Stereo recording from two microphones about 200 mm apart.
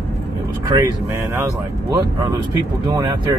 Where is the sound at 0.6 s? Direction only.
15° right (ahead or behind).